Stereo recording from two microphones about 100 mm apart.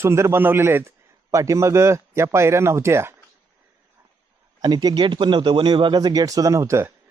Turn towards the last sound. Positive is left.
turn(degrees=-30)  # may be behind; listen again after turning